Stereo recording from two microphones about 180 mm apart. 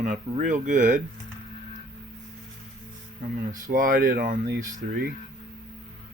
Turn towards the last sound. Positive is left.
turn(degrees=-55)  # may be behind; listen again after turning